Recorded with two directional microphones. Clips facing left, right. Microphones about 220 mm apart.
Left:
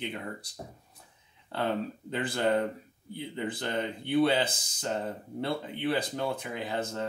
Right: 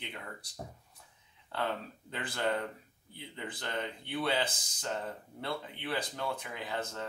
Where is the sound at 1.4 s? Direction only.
30° left (ahead or behind).